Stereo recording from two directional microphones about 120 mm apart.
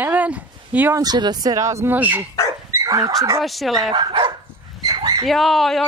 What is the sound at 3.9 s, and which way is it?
Speech, 40° right (ahead or behind).